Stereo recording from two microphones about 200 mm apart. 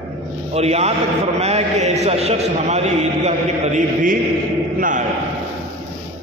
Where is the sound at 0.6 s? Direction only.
30° right (ahead or behind).